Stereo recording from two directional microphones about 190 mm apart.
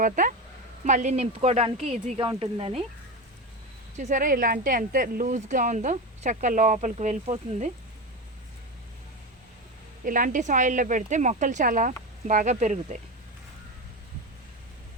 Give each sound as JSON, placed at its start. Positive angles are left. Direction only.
{"t": 0.0, "sound": "speech", "side_deg": -45}
{"t": 3.9, "sound": "speech", "side_deg": -40}
{"t": 10.0, "sound": "speech", "side_deg": -45}